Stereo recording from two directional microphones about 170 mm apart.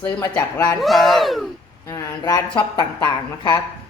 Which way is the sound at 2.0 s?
20° left (ahead or behind).